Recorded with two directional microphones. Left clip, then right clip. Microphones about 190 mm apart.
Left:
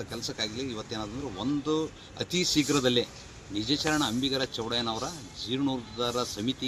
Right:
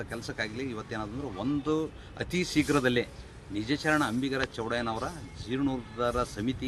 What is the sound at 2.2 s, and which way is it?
Speech, 35° right (ahead or behind).